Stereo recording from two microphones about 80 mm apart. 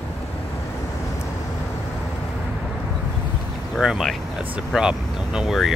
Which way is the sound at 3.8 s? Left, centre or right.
Centre.